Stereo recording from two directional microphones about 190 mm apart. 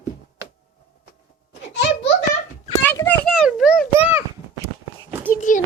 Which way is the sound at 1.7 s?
65° left (ahead or behind).